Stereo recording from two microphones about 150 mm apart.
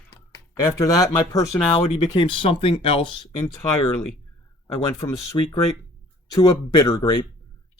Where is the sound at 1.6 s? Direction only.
40° left (ahead or behind).